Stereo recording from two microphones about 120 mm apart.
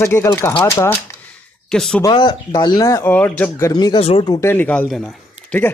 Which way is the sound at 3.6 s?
30° left (ahead or behind).